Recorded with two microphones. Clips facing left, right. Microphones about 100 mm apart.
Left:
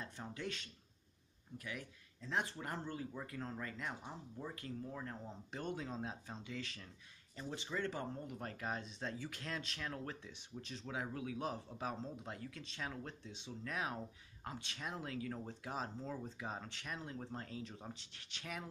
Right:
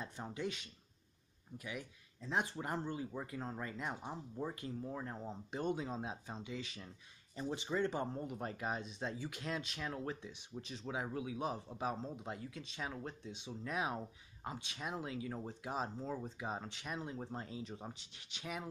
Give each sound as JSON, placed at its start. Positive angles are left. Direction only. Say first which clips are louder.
{"t": 0.0, "sound": "speech", "louder": "right 4 dB", "side_deg": -15}